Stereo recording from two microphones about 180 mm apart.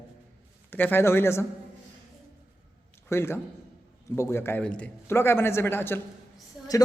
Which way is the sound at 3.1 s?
15° left (ahead or behind).